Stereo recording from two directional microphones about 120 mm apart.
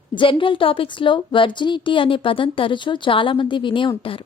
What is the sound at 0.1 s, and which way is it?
A woman's voice, 45° left (ahead or behind).